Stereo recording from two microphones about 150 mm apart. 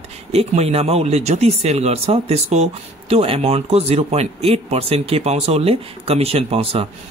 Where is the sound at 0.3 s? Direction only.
45° right (ahead or behind).